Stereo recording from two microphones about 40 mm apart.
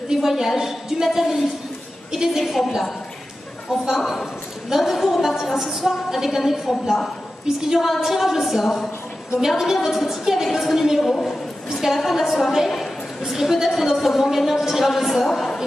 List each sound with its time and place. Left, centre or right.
0.1 s a woman's voice: centre
2.6 s a woman's voice: centre
3.9 s a woman's voice: centre
12.6 s a sound: centre
13.2 s a woman's voice: centre
15.3 s speech: centre